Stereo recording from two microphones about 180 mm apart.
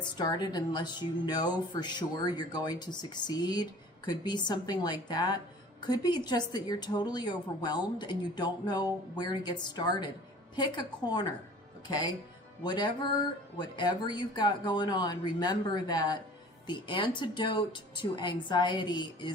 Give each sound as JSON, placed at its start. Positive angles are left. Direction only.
{"t": 0.0, "sound": "speech", "side_deg": 25}